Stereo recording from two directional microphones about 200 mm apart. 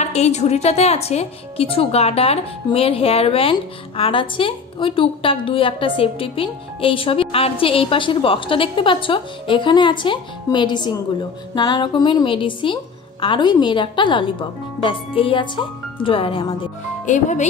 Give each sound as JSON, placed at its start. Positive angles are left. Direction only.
{"t": 0.0, "sound": "a woman's voice", "side_deg": 35}
{"t": 17.0, "sound": "speech", "side_deg": 40}